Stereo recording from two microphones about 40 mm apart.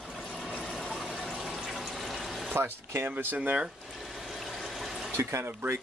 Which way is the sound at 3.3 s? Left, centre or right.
Right.